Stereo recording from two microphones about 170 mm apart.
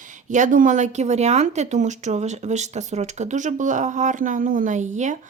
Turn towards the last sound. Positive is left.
turn(degrees=-45)  # may be behind; listen again after turning